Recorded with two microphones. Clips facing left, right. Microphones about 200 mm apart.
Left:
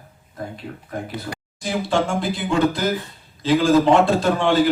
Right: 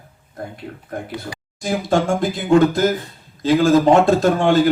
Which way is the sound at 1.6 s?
45° right (ahead or behind).